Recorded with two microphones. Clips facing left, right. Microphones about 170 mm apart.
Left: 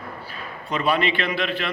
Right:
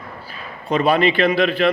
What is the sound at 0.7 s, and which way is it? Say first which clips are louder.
Speech: right 6 dB; 40° right (ahead or behind).